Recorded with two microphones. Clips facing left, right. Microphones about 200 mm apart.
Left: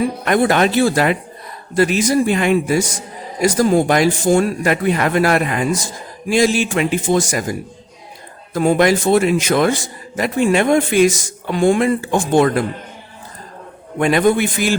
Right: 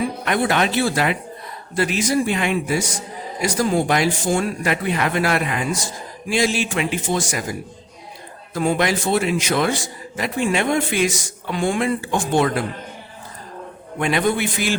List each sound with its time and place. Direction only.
0.3 s a man's voice: 45° left (ahead or behind)
8.5 s a man's voice: 45° left (ahead or behind)
14.0 s a man's voice: 45° left (ahead or behind)